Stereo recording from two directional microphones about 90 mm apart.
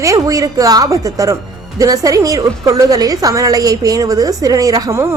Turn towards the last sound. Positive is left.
turn(degrees=-40)  # may be behind; listen again after turning